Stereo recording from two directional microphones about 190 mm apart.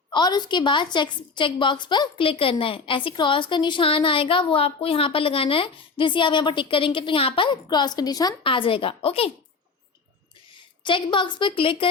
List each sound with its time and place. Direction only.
0.1 s a woman's voice: 20° left (ahead or behind)
10.8 s a woman's voice: 25° left (ahead or behind)